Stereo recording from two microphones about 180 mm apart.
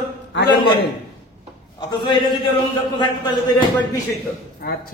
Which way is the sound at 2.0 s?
25° left (ahead or behind).